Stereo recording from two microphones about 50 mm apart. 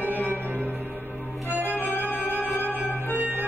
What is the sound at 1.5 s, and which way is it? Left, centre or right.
Organ, right.